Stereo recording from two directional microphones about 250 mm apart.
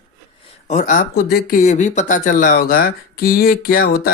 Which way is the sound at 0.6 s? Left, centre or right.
Left.